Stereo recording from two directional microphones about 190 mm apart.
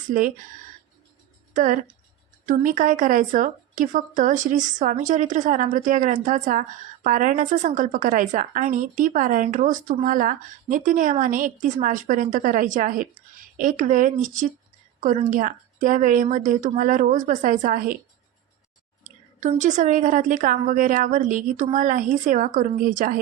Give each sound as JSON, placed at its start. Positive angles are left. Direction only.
{"t": 0.1, "sound": "a woman's voice", "side_deg": -45}
{"t": 1.5, "sound": "a woman's voice", "side_deg": -45}
{"t": 19.0, "sound": "a woman's voice", "side_deg": -40}